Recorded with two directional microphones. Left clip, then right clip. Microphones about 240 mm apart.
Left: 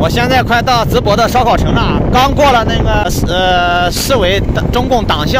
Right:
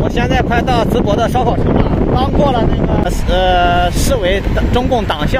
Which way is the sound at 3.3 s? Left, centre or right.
Centre.